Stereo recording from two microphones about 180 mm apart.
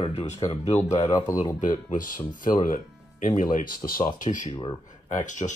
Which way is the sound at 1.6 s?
45° left (ahead or behind).